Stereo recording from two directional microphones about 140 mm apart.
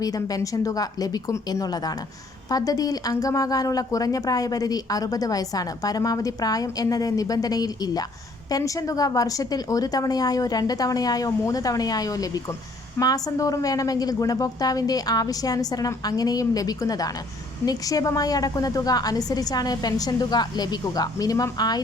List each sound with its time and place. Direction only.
0.0 s a woman's voice: 25° left (ahead or behind)